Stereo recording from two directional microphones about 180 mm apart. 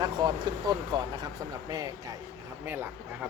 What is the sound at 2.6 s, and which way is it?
Speech, 10° right (ahead or behind).